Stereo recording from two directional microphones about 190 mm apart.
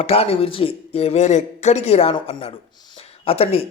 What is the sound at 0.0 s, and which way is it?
Speech, 30° left (ahead or behind).